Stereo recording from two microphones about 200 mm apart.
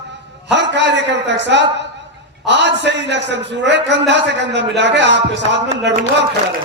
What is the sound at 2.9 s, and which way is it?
A man's voice, 60° right (ahead or behind).